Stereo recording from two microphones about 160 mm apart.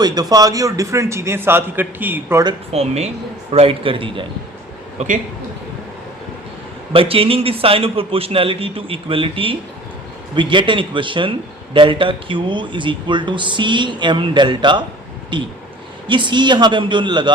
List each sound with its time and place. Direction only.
0.0 s a man's voice: 25° right (ahead or behind)
2.7 s a man's voice: 40° right (ahead or behind)
4.9 s a man's voice: 55° right (ahead or behind)
6.9 s a man's voice: 35° right (ahead or behind)